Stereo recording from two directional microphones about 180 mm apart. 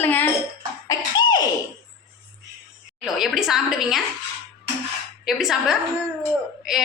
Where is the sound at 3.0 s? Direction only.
Centre (ahead or behind).